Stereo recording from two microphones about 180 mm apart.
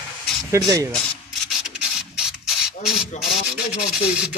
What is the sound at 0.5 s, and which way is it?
Speech, 20° right (ahead or behind).